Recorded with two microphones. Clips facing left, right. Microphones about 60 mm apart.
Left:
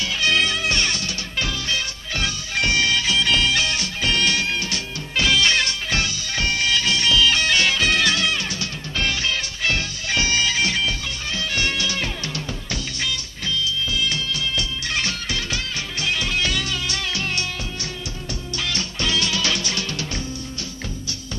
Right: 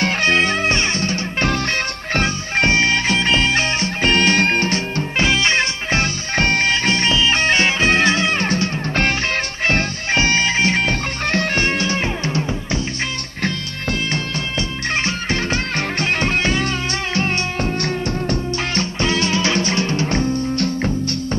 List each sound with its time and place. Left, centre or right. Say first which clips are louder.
0.0 s music: right 5 dB; right
1.5 s music: right 6 dB; right
2.2 s music: right 4 dB; right
13.4 s music: right 1 dB; right
15.0 s music: right 6 dB; right
18.9 s music: right 4 dB; right